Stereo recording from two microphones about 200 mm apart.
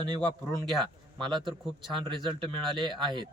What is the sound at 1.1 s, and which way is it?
Speech, 25° right (ahead or behind).